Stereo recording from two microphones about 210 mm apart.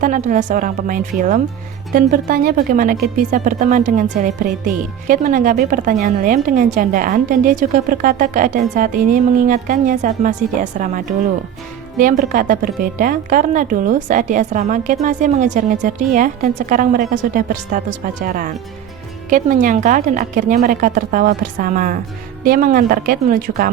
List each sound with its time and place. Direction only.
0.0 s a woman's voice: 35° right (ahead or behind)